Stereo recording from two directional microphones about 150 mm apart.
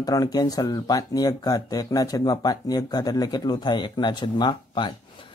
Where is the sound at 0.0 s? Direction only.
25° left (ahead or behind).